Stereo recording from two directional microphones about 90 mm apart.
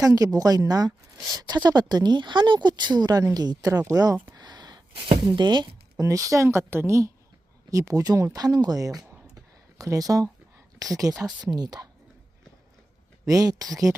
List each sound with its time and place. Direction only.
0.0 s a woman's voice: 40° right (ahead or behind)
4.4 s a sound: 50° right (ahead or behind)
4.9 s speech: 90° right
5.2 s speech: 55° right (ahead or behind)
6.0 s a woman's voice: 40° right (ahead or behind)
13.2 s a woman's voice: 40° right (ahead or behind)